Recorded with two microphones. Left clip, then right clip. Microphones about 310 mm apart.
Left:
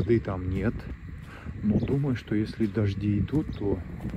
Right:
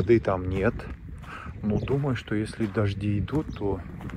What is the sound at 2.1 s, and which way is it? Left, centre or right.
Speech, centre.